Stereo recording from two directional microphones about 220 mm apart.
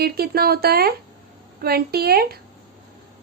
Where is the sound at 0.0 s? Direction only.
45° right (ahead or behind).